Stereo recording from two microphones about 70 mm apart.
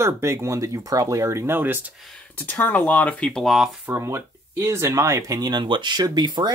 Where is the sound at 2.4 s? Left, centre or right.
Left.